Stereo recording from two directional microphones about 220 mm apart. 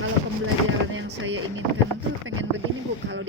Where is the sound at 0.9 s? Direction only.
60° right (ahead or behind).